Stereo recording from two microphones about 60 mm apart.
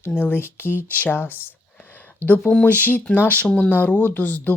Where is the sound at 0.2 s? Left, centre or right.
Left.